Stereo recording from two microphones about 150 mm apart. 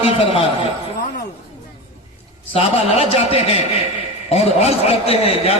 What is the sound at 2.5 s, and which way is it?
A man's voice, 40° left (ahead or behind).